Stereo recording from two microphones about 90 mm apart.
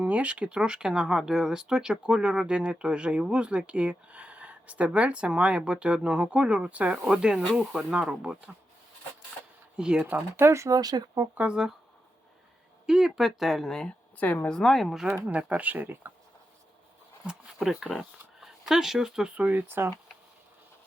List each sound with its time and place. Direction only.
0.0 s speech: 15° right (ahead or behind)
9.7 s speech: 10° right (ahead or behind)
10.1 s speech: 25° right (ahead or behind); by 11.2 s 45° right (ahead or behind)
11.3 s speech: 10° right (ahead or behind)
12.8 s speech: 5° right (ahead or behind)
14.2 s speech: 15° left (ahead or behind); by 15.0 s centre (ahead or behind)
15.3 s speech: 15° right (ahead or behind)
17.2 s speech: 5° right (ahead or behind); by 19.9 s 25° right (ahead or behind)